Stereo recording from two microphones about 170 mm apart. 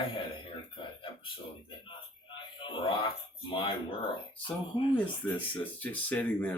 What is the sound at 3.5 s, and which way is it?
Speech, 30° left (ahead or behind).